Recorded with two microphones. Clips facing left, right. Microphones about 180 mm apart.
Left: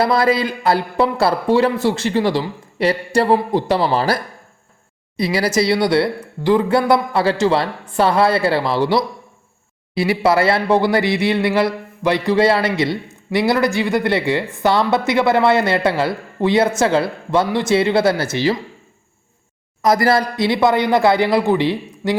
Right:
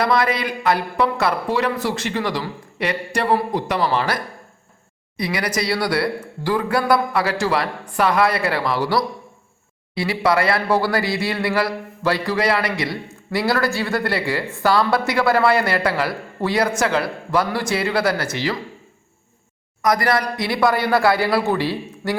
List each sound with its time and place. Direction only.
0.0 s speech: 30° left (ahead or behind)
19.8 s speech: 25° left (ahead or behind)